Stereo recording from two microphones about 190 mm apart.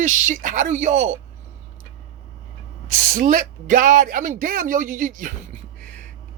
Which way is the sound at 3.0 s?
45° right (ahead or behind).